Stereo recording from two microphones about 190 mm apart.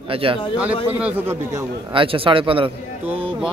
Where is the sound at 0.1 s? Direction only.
30° right (ahead or behind).